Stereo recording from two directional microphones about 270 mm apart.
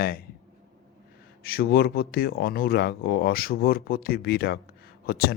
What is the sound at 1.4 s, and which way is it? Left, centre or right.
Speech, left.